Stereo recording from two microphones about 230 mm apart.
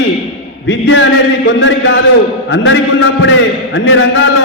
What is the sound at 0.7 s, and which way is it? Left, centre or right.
Chant, left.